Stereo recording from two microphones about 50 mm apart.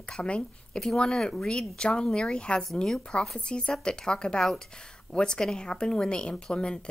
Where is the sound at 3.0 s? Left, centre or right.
Centre.